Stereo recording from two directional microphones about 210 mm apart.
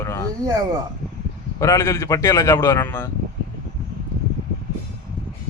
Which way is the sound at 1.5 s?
15° left (ahead or behind).